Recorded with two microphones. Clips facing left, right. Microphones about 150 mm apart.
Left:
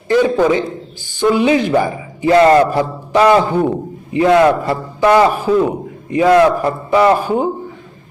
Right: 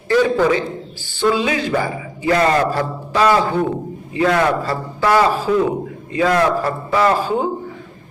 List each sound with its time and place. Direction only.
0.1 s a man's voice: 20° left (ahead or behind)